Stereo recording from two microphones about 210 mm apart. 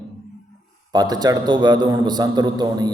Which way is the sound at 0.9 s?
20° right (ahead or behind).